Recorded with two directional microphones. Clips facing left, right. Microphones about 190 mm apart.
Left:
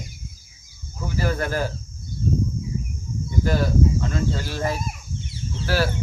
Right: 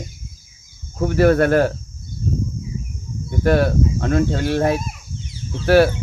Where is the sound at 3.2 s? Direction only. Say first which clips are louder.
Right 7 dB; 65° right (ahead or behind).